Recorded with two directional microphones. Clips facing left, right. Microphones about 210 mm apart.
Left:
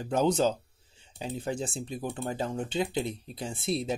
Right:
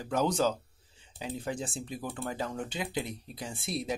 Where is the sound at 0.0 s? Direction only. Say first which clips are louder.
Left 3 dB; 25° left (ahead or behind).